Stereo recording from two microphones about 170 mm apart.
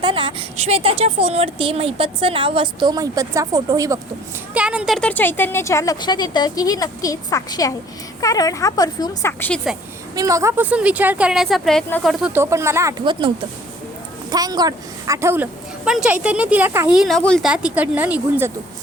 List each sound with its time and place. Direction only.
0.0 s a woman's voice: 30° right (ahead or behind)
4.5 s a woman's voice: 5° right (ahead or behind)
4.9 s speech: 10° left (ahead or behind)
9.7 s speech: centre (ahead or behind)
10.2 s a woman's voice: 20° right (ahead or behind); by 12.3 s centre (ahead or behind)
12.3 s a woman's voice: 15° right (ahead or behind)
15.8 s a woman's voice: 5° right (ahead or behind)